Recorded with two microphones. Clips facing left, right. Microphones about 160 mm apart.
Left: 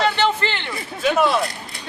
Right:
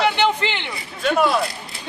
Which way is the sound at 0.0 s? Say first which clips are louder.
Even; 15° right (ahead or behind).